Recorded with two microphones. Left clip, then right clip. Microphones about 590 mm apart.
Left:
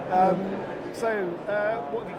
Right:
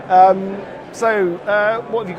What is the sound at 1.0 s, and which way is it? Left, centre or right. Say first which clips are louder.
Speech: right 11 dB; right.